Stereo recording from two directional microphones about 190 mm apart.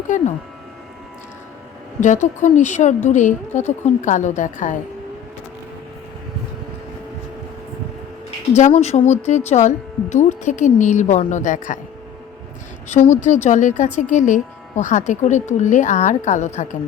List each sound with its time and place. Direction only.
2.0 s speech: 40° left (ahead or behind)
8.5 s speech: 35° left (ahead or behind)
12.9 s speech: 40° left (ahead or behind)